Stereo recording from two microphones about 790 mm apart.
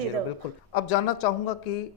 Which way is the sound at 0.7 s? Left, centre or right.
Left.